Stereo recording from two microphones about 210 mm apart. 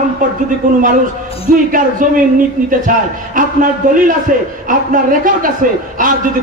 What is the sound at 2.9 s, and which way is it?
A man's voice, 40° right (ahead or behind).